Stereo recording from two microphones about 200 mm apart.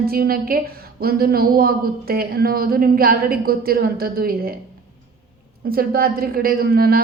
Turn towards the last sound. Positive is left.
turn(degrees=-50)  # may be behind; listen again after turning